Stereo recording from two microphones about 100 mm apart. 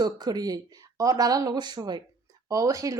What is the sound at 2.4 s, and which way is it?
Speech, 35° right (ahead or behind).